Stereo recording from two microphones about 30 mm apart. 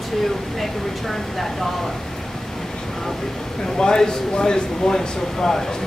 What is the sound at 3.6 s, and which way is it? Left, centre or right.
Speech, left.